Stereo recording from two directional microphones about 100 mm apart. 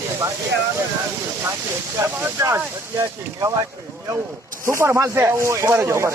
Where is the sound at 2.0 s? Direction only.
30° right (ahead or behind).